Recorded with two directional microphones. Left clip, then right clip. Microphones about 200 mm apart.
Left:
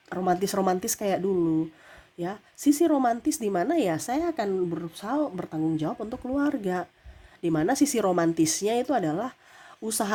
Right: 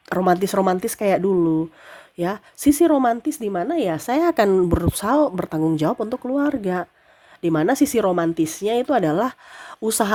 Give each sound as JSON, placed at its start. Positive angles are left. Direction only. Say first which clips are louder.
{"t": 0.1, "sound": "speech", "louder": "right 7 dB", "side_deg": -25}